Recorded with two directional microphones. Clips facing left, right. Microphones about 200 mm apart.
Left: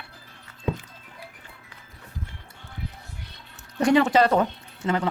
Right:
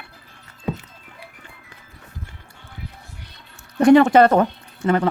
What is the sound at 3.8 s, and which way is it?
Speech, 55° right (ahead or behind).